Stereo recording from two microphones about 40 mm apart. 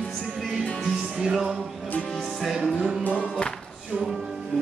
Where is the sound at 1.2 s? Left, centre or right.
Centre.